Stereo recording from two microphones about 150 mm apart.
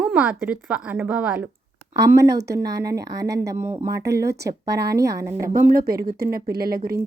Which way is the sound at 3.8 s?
90° right.